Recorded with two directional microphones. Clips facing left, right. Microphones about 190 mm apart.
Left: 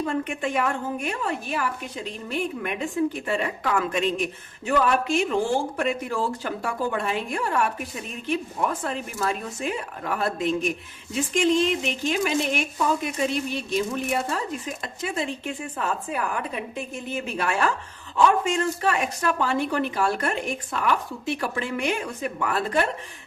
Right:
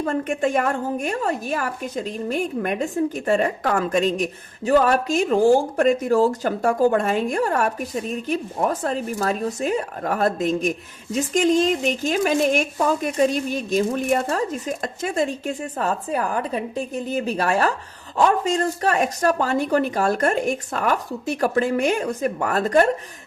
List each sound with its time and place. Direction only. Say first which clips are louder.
0.0 s a woman's voice: right 5 dB; 45° right (ahead or behind)